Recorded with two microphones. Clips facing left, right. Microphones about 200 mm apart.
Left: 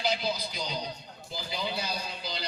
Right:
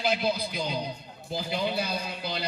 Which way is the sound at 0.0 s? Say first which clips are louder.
Right 3 dB; 55° right (ahead or behind).